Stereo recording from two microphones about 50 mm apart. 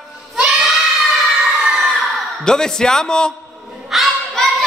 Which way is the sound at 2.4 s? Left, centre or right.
Centre.